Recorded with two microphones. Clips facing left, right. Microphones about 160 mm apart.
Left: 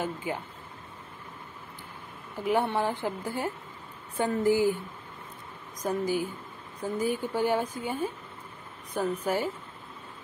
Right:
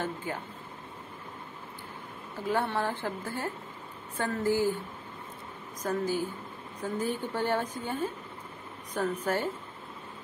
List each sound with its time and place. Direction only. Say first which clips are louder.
0.0 s speech: left 2 dB; 15° left (ahead or behind)
2.3 s speech: left 3 dB; 15° left (ahead or behind)
5.8 s speech: left 2 dB; 15° left (ahead or behind)
9.2 s speech: left 1 dB; 10° left (ahead or behind)